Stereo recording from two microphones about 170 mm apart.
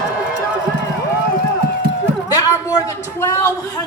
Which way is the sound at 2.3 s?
20° left (ahead or behind).